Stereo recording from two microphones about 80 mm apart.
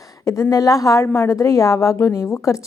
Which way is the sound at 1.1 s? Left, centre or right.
Left.